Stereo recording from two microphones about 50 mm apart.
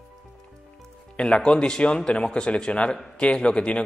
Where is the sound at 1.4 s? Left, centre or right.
Centre.